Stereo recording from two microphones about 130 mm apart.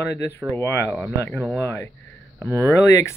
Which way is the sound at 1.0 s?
5° left (ahead or behind).